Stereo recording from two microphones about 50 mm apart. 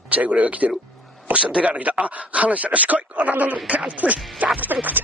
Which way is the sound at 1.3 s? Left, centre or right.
Right.